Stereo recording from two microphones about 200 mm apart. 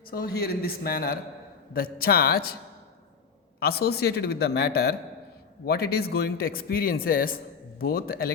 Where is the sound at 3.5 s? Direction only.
50° left (ahead or behind).